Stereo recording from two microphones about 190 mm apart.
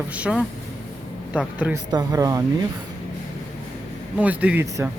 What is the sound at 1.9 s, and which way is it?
Speech, 20° right (ahead or behind).